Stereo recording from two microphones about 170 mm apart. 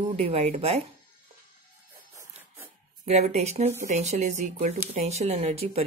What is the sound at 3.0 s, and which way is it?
Speech, 40° right (ahead or behind).